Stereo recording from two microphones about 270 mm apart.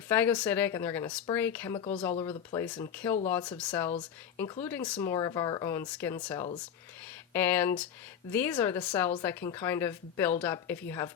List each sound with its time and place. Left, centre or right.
0.1 s speech: centre